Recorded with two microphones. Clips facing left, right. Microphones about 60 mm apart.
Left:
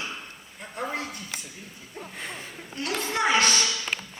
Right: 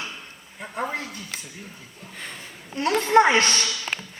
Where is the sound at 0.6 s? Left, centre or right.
Right.